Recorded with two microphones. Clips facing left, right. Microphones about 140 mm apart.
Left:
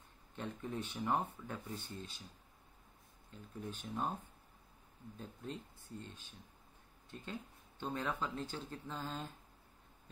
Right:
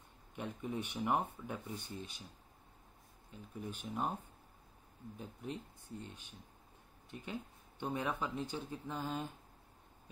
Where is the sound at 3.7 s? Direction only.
10° right (ahead or behind).